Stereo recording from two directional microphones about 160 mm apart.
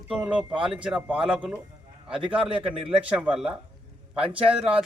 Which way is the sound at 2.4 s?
35° right (ahead or behind).